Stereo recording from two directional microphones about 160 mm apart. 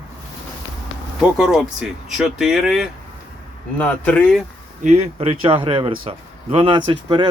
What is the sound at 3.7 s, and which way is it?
Speech, 10° left (ahead or behind).